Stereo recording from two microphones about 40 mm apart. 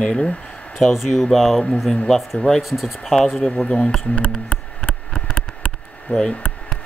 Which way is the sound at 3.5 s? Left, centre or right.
Left.